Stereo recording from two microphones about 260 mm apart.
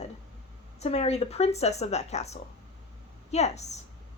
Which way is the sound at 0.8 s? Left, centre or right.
Left.